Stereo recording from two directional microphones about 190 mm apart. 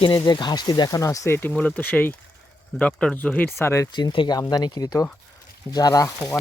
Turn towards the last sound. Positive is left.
turn(degrees=15)  # may be behind; listen again after turning